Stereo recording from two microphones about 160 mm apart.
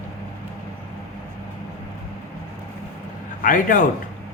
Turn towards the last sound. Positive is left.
turn(degrees=55)  # may be behind; listen again after turning